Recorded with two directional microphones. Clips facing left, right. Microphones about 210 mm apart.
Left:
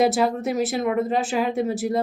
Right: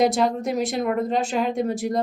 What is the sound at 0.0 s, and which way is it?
A woman's voice, 5° left (ahead or behind).